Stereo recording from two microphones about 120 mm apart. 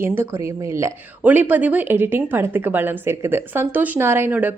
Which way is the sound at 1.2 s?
10° right (ahead or behind).